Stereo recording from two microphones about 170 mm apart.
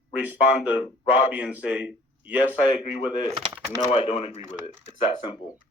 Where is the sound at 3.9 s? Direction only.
35° left (ahead or behind).